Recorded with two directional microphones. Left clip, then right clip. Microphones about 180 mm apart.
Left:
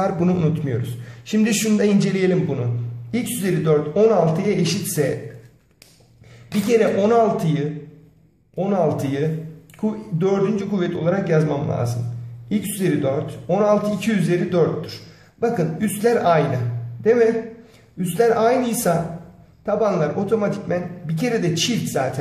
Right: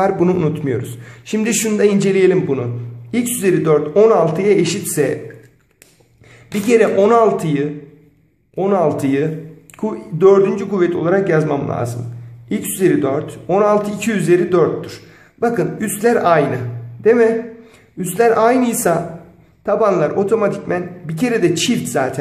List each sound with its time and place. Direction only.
0.0 s a man's voice: 25° right (ahead or behind)
6.7 s a man's voice: 30° right (ahead or behind)